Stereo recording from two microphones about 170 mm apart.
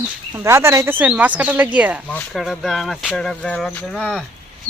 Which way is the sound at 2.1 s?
10° left (ahead or behind).